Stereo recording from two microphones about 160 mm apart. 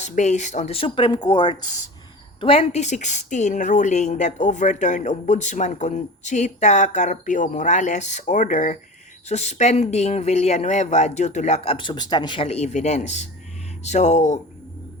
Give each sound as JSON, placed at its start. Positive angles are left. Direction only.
{"t": 0.0, "sound": "a woman's voice", "side_deg": 45}